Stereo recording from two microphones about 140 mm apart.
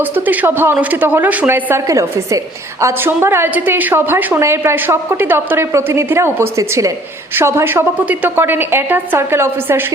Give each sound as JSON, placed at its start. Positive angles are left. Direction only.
{"t": 0.0, "sound": "a woman's voice", "side_deg": -15}